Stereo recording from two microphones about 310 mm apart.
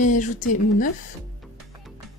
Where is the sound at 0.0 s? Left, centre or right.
Left.